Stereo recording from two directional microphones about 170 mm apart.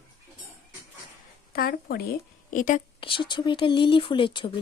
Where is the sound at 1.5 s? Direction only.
60° left (ahead or behind).